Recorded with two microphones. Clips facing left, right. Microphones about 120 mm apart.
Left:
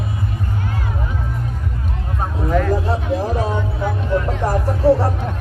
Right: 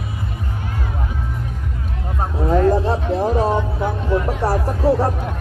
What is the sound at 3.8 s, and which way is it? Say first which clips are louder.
Music: left 2 dB; 10° right (ahead or behind).